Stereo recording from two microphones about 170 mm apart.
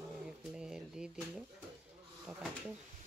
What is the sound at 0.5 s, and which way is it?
Speech, 5° right (ahead or behind).